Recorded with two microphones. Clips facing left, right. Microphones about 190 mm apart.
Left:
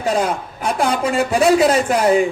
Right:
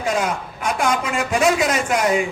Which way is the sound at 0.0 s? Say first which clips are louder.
Left 3 dB; 35° left (ahead or behind).